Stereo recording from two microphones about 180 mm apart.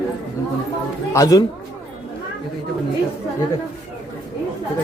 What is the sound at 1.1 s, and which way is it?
Speech, 20° left (ahead or behind).